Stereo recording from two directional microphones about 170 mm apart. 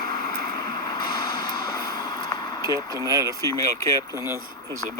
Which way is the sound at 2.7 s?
20° right (ahead or behind).